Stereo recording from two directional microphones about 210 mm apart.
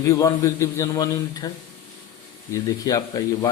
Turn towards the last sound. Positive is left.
turn(degrees=15)  # may be behind; listen again after turning